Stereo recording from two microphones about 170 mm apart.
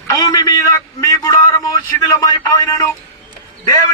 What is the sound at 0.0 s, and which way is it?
A man's voice, 20° left (ahead or behind).